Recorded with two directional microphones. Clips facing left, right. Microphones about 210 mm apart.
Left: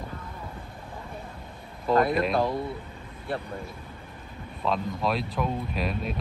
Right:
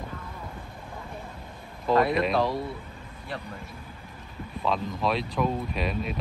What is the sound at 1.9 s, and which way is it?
Speech, centre (ahead or behind).